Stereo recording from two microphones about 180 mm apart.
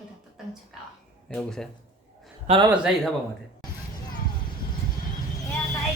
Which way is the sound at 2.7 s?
5° right (ahead or behind).